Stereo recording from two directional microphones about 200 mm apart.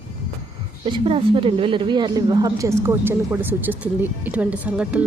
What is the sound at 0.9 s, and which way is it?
A woman's voice, 25° right (ahead or behind).